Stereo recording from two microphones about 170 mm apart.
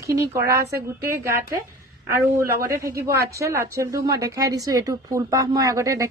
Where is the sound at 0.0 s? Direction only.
15° right (ahead or behind).